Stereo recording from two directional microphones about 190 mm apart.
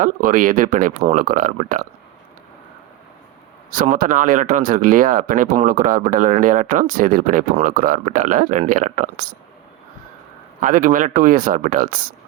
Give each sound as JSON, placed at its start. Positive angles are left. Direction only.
{"t": 0.0, "sound": "speech", "side_deg": -45}
{"t": 3.7, "sound": "speech", "side_deg": -45}
{"t": 10.6, "sound": "speech", "side_deg": -45}